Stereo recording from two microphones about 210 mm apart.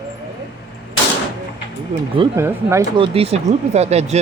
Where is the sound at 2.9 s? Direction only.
25° right (ahead or behind).